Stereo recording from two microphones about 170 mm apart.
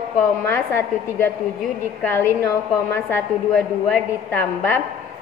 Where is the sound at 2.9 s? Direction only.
15° left (ahead or behind).